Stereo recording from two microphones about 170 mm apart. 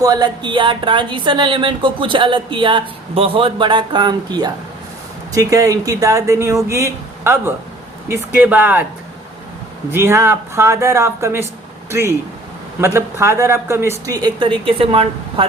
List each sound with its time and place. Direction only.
0.0 s speech: 20° right (ahead or behind)
9.9 s speech: 15° right (ahead or behind); by 15.4 s 30° right (ahead or behind)